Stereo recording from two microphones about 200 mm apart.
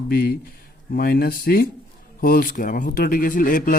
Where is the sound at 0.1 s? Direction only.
50° left (ahead or behind).